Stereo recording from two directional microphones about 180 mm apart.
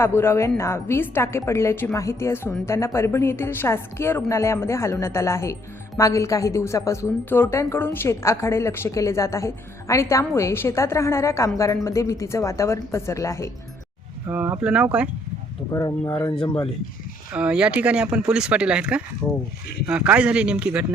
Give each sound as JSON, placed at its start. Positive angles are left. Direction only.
{"t": 0.0, "sound": "a woman's voice", "side_deg": 15}
{"t": 14.3, "sound": "speech", "side_deg": -10}
{"t": 15.7, "sound": "speech", "side_deg": 20}
{"t": 17.3, "sound": "speech", "side_deg": -5}